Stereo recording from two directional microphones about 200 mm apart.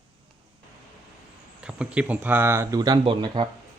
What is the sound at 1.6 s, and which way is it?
A man's voice, 5° right (ahead or behind).